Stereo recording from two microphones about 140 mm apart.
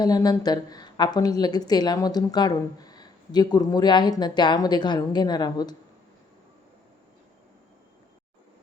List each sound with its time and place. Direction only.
0.0 s a woman's voice: 25° left (ahead or behind)